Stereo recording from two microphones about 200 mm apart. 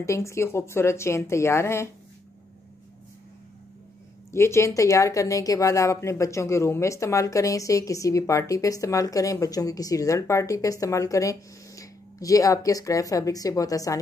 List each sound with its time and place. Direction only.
0.0 s speech: 15° left (ahead or behind)
4.3 s speech: 15° left (ahead or behind)